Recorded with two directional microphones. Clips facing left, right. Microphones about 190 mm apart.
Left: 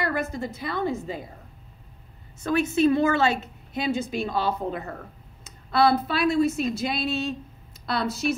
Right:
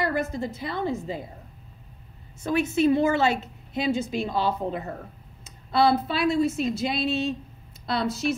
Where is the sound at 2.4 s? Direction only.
25° right (ahead or behind).